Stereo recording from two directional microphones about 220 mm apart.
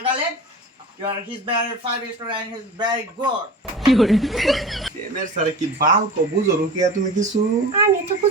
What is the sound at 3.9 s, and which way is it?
Speech, centre (ahead or behind).